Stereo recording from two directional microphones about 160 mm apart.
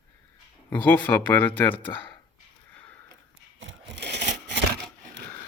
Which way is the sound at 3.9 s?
90° right.